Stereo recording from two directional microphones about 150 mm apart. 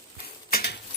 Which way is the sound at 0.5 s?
90° left.